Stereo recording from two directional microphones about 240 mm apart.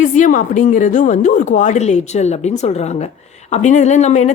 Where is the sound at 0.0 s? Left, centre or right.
Left.